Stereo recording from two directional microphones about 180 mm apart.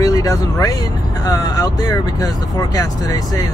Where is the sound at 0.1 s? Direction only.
20° left (ahead or behind).